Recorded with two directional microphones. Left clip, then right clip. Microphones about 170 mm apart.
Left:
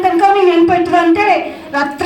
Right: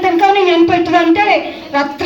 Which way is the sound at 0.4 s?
40° left (ahead or behind).